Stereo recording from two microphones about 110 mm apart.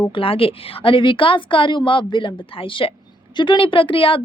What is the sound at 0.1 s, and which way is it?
A woman's voice, 55° left (ahead or behind).